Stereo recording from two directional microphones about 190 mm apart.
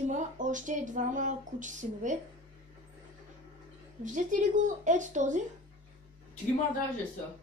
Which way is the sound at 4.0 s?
40° right (ahead or behind).